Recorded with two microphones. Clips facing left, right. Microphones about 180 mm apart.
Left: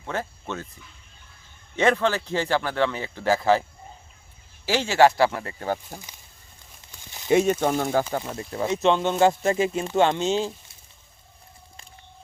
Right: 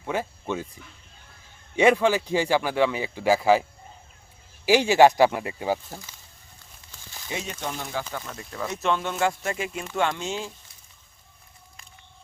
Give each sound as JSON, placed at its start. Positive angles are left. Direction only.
{"t": 0.0, "sound": "speech", "side_deg": -10}
{"t": 1.7, "sound": "speech", "side_deg": -10}
{"t": 5.9, "sound": "speech", "side_deg": 15}
{"t": 6.9, "sound": "a sound", "side_deg": 20}
{"t": 7.3, "sound": "speech", "side_deg": 50}
{"t": 8.2, "sound": "speech", "side_deg": 25}